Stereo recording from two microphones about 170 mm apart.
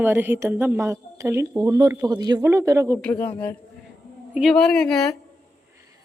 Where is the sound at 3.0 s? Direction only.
10° left (ahead or behind).